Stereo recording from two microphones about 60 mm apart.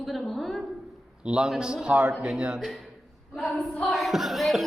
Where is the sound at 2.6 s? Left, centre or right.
Centre.